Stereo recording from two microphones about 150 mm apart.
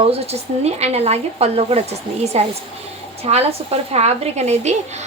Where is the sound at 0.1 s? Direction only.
45° right (ahead or behind).